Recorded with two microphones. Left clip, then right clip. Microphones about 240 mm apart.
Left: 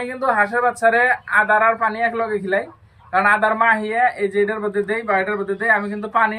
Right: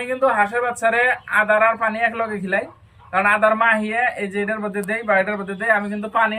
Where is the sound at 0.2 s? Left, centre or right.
Centre.